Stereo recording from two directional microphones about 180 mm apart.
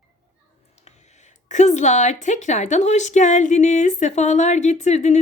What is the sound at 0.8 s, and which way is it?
A woman's voice, 40° left (ahead or behind).